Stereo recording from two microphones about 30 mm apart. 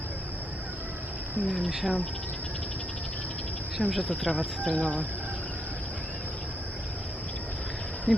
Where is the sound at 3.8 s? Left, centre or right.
Right.